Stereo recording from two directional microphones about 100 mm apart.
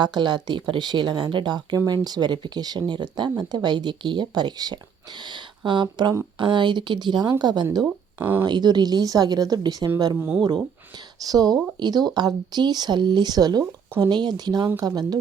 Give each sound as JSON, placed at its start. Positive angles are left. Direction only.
{"t": 0.0, "sound": "speech", "side_deg": -50}
{"t": 10.2, "sound": "speech", "side_deg": -20}
{"t": 10.4, "sound": "speech", "side_deg": -45}